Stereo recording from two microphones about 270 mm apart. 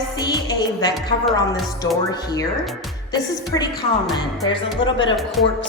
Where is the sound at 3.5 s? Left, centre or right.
Centre.